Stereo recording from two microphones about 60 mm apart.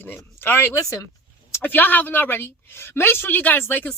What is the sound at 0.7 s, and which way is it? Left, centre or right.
Speech, left.